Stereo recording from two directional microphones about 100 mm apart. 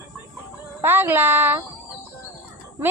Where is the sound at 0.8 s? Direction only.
20° right (ahead or behind).